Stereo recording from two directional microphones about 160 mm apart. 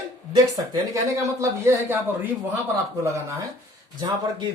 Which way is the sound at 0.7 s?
20° right (ahead or behind).